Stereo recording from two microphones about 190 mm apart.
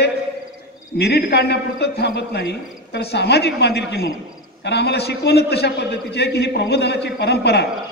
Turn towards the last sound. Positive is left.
turn(degrees=60)  # may be behind; listen again after turning